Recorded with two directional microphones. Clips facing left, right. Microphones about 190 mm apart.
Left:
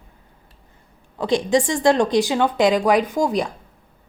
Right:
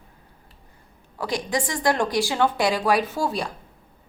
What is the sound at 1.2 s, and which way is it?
A woman's voice, 25° left (ahead or behind).